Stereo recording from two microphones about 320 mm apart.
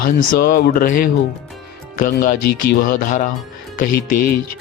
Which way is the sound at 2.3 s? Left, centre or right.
Left.